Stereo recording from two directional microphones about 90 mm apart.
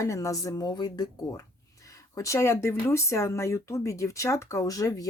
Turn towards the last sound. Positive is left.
turn(degrees=40)  # may be behind; listen again after turning